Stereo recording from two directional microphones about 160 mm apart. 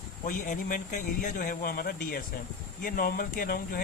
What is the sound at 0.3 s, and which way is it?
Speech, 55° left (ahead or behind).